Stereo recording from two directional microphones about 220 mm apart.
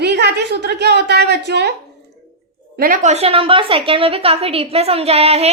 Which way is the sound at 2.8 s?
35° right (ahead or behind).